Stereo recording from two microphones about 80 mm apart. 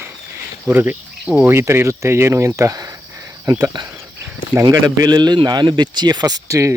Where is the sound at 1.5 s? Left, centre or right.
Right.